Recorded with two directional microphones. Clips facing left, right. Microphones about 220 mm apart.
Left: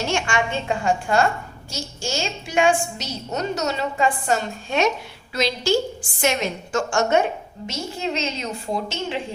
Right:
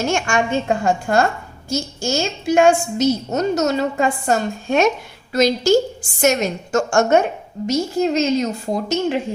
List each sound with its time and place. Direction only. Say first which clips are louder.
0.1 s a woman's voice: right 4 dB; 45° right (ahead or behind)